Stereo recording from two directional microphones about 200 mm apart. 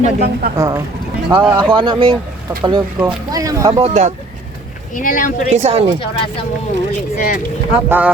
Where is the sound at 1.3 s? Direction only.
10° right (ahead or behind).